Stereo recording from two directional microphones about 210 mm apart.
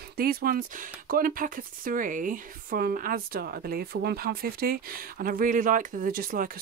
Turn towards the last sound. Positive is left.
turn(degrees=-40)  # may be behind; listen again after turning